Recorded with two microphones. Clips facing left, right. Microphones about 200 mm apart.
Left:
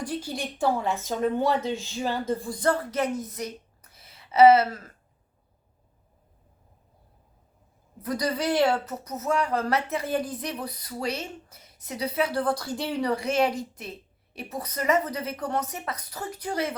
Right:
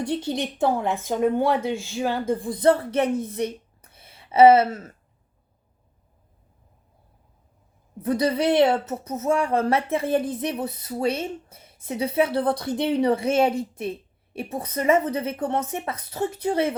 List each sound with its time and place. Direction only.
0.0 s speech: 25° right (ahead or behind)
8.0 s speech: 25° right (ahead or behind)